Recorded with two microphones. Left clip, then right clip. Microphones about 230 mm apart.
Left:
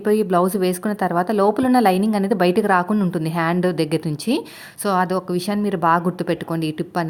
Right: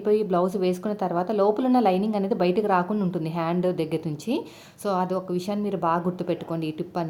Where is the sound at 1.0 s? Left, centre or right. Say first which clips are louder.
Left 7 dB; left.